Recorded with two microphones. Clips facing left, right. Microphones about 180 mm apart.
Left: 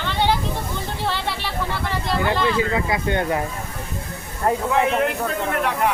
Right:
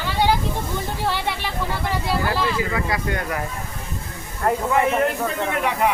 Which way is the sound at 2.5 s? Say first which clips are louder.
Left 2 dB; 25° left (ahead or behind).